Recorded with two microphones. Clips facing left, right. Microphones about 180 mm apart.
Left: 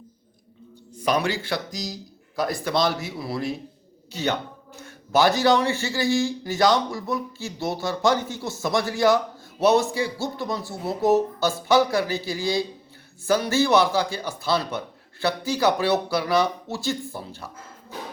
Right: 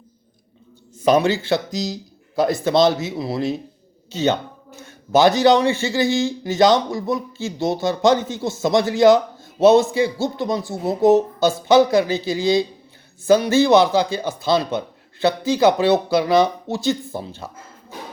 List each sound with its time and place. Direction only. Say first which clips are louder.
0.9 s a man's voice: right 7 dB; 25° right (ahead or behind)